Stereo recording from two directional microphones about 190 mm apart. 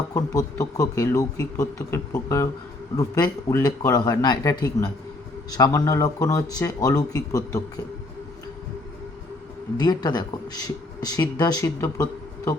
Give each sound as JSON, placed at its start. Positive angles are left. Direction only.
{"t": 0.1, "sound": "speech", "side_deg": 20}
{"t": 9.7, "sound": "speech", "side_deg": 20}